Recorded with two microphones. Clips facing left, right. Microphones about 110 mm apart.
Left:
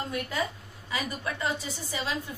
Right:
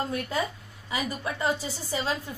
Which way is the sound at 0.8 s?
25° right (ahead or behind).